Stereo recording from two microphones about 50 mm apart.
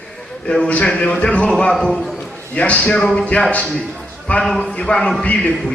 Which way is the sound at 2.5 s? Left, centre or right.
Left.